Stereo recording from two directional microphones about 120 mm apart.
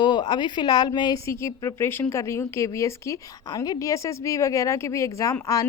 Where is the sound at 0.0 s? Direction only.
40° left (ahead or behind).